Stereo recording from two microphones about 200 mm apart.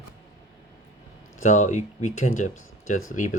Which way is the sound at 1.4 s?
40° left (ahead or behind).